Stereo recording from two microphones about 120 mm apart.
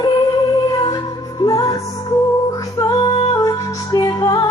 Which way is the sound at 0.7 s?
35° left (ahead or behind).